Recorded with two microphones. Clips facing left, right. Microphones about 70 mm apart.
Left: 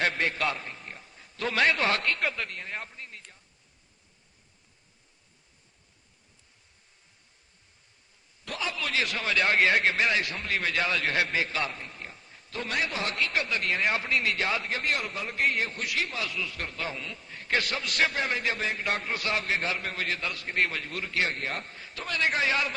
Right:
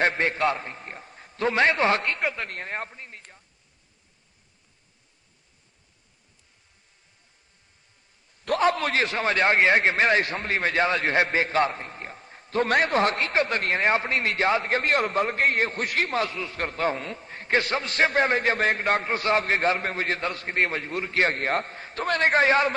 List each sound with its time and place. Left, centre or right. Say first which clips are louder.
0.0 s a sound: right 5 dB; right
1.4 s a man's voice: right 4 dB; right
2.5 s speech: right 5 dB; right
8.4 s a man's voice: right 11 dB; right
21.2 s a man's voice: right 7 dB; right